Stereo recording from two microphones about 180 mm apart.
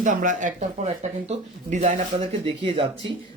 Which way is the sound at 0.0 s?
45° right (ahead or behind).